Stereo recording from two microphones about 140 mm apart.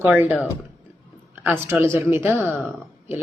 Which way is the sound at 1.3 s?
10° right (ahead or behind).